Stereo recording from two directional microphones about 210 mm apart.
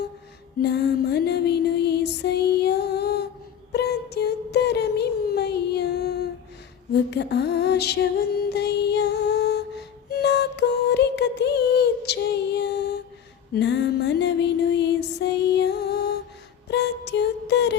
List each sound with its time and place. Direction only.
0.6 s music: 50° left (ahead or behind)
3.7 s a sound: 50° left (ahead or behind)
6.9 s mantra: 55° left (ahead or behind)
8.4 s music: 55° left (ahead or behind)